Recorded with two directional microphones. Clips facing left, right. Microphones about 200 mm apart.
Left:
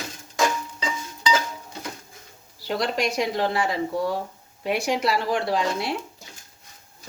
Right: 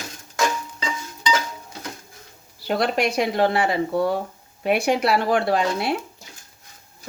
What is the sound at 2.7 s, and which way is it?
Speech, 60° right (ahead or behind).